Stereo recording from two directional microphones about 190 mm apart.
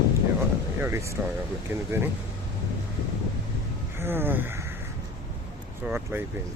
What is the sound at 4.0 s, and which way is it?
Speech, 10° right (ahead or behind).